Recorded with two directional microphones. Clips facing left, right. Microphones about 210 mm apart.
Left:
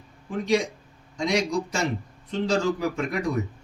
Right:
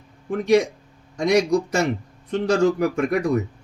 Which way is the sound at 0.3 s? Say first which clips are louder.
Right 6 dB; 60° right (ahead or behind).